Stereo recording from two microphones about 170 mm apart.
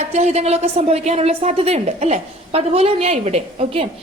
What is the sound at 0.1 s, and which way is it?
A woman's voice, 40° right (ahead or behind).